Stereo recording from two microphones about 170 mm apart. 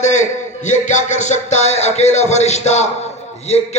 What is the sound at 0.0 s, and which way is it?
Speech, 45° left (ahead or behind).